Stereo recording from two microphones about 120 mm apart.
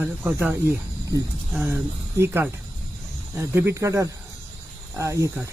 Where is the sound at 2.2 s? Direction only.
20° right (ahead or behind).